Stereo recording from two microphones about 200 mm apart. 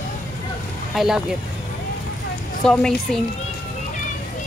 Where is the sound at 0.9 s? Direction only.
Centre (ahead or behind).